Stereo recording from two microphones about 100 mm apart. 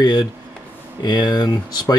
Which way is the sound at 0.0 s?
45° left (ahead or behind).